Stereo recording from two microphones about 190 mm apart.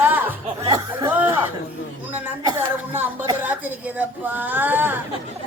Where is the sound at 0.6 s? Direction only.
20° right (ahead or behind).